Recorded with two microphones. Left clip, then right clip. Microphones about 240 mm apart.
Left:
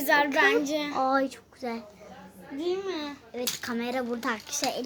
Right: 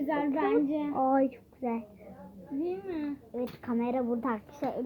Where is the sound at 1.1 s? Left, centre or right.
Centre.